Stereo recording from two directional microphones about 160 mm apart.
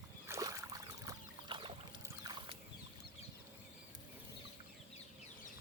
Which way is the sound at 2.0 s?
25° right (ahead or behind).